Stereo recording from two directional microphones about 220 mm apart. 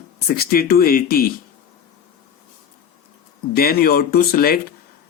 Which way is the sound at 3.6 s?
45° left (ahead or behind).